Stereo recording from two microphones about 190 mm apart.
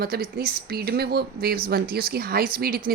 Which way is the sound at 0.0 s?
55° right (ahead or behind).